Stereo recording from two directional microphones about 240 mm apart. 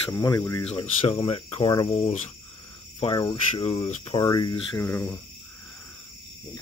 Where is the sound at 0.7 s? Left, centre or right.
Left.